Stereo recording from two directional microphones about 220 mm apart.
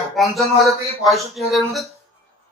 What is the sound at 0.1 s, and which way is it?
Speech, centre (ahead or behind).